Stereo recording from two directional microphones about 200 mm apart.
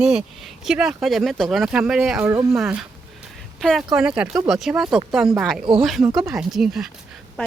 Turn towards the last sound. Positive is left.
turn(degrees=0)  # may be behind; listen again after turning